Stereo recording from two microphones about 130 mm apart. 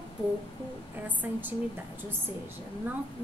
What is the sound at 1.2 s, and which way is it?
Speech, 15° right (ahead or behind).